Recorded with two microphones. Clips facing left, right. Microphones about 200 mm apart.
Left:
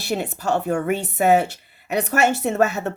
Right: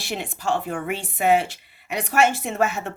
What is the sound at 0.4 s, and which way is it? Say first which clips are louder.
A woman's voice: left 4 dB; 40° left (ahead or behind).